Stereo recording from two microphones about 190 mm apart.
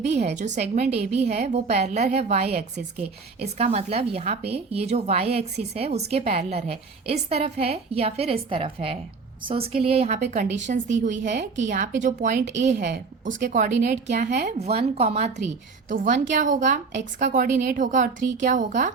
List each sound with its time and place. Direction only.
0.0 s a woman's voice: 35° right (ahead or behind)